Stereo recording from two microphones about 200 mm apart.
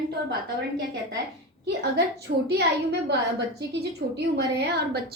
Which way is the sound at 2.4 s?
55° right (ahead or behind).